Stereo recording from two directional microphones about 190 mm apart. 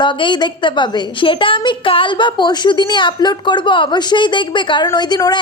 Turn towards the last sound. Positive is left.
turn(degrees=20)  # may be behind; listen again after turning